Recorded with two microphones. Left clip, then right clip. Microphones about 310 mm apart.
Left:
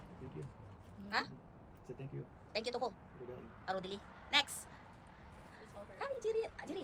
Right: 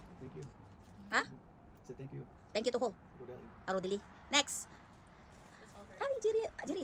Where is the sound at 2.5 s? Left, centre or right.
Right.